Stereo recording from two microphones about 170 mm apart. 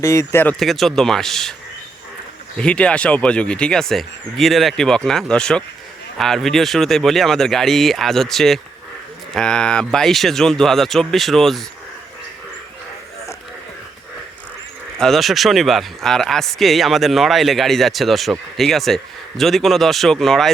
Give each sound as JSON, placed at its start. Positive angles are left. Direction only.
{"t": 0.0, "sound": "speech", "side_deg": 20}
{"t": 0.6, "sound": "speech", "side_deg": 0}
{"t": 2.6, "sound": "speech", "side_deg": 5}
{"t": 14.9, "sound": "speech", "side_deg": 0}